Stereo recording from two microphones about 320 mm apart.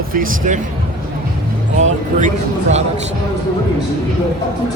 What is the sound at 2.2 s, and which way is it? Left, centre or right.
Speech, right.